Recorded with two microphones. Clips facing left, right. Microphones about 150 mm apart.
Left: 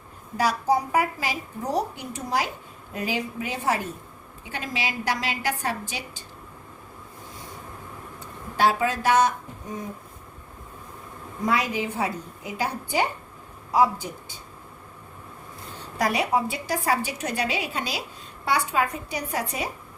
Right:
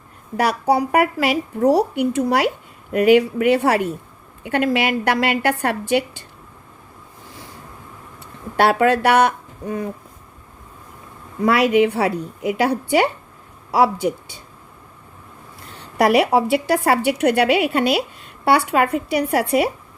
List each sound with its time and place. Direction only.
0.3 s a woman's voice: 65° right (ahead or behind)
8.5 s speech: 65° right (ahead or behind)
11.4 s a woman's voice: 70° right (ahead or behind)
16.0 s a woman's voice: 70° right (ahead or behind)